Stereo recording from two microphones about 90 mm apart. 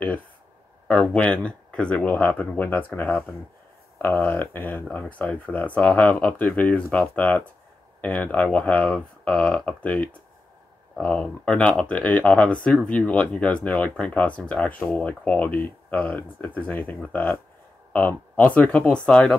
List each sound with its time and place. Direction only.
0.8 s speech: 15° left (ahead or behind)